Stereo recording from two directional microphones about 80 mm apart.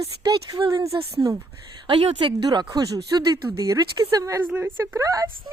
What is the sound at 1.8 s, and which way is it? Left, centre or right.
Speech, right.